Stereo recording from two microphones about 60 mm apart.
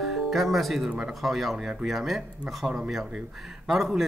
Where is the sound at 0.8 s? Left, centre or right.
Centre.